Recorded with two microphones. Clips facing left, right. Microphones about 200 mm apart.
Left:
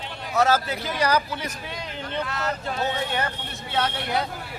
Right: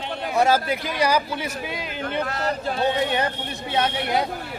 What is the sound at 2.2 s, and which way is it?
Speech, 35° right (ahead or behind).